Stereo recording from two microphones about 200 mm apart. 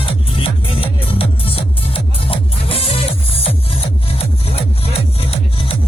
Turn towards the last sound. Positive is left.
turn(degrees=30)  # may be behind; listen again after turning